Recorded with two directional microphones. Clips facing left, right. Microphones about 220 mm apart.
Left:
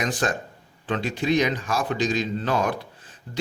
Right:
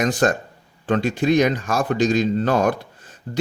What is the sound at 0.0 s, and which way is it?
Speech, 45° right (ahead or behind).